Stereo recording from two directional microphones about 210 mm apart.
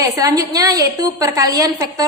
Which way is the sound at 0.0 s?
15° right (ahead or behind).